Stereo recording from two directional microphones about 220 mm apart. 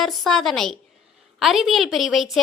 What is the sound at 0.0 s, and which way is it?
A woman's voice, centre (ahead or behind).